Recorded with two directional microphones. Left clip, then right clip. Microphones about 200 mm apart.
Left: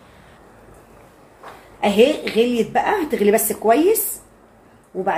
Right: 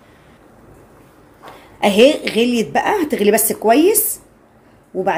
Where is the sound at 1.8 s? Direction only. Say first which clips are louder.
Right 4 dB; 35° right (ahead or behind).